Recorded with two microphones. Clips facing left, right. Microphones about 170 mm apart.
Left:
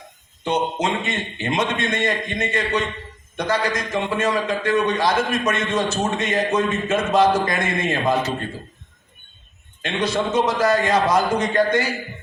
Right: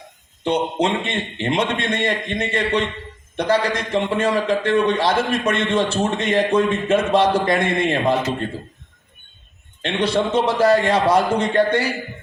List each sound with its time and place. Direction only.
0.4 s a man's voice: 30° right (ahead or behind)
9.8 s a man's voice: 30° right (ahead or behind)